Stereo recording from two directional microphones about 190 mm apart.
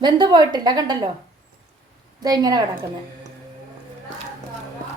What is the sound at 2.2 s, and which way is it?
Speech, 20° right (ahead or behind).